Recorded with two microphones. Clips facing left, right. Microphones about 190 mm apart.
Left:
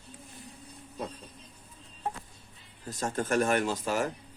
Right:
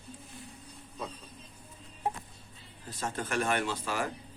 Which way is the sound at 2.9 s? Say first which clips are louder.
Left 5 dB; 45° left (ahead or behind).